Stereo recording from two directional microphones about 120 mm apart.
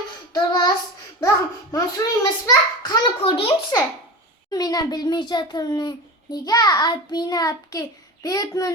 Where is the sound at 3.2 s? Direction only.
50° left (ahead or behind).